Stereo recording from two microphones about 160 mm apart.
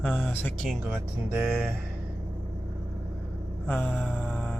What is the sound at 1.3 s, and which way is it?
Speech, 5° right (ahead or behind).